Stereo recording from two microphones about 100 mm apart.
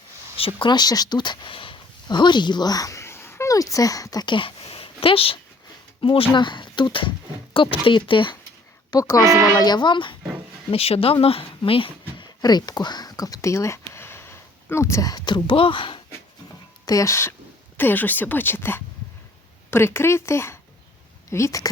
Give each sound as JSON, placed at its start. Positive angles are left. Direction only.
{"t": 0.3, "sound": "speech", "side_deg": 70}
{"t": 0.7, "sound": "speech", "side_deg": 40}
{"t": 4.3, "sound": "a sound", "side_deg": 60}
{"t": 6.0, "sound": "speech", "side_deg": 60}
{"t": 8.9, "sound": "speech", "side_deg": 40}
{"t": 9.2, "sound": "speech", "side_deg": -30}
{"t": 9.6, "sound": "speech", "side_deg": 45}
{"t": 10.7, "sound": "speech", "side_deg": 80}
{"t": 15.1, "sound": "speech", "side_deg": 45}
{"t": 16.8, "sound": "speech", "side_deg": 35}